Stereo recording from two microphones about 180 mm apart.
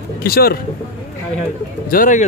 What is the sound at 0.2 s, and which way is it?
Speech, 55° left (ahead or behind).